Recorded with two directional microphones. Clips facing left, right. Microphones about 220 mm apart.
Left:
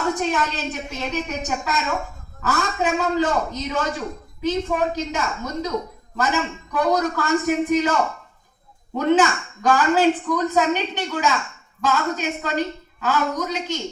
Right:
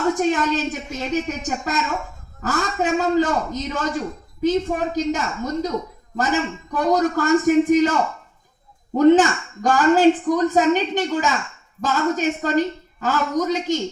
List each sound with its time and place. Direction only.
0.1 s speech: 45° right (ahead or behind)
9.0 s speech: 45° right (ahead or behind)